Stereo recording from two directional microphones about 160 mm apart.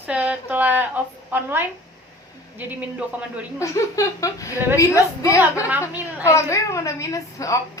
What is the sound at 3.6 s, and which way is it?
Speech, 20° left (ahead or behind).